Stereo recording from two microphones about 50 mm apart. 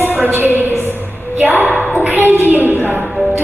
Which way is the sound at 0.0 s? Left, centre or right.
Right.